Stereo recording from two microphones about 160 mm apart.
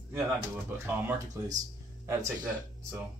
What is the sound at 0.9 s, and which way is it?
Speech, 20° right (ahead or behind).